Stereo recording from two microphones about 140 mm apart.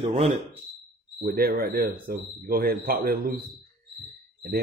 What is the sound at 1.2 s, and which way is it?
Speech, 90° right.